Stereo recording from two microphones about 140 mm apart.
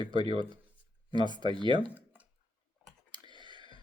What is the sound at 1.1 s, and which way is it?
Speech, 30° right (ahead or behind).